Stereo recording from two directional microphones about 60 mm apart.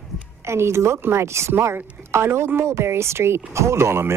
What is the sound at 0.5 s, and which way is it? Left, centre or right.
Speech, right.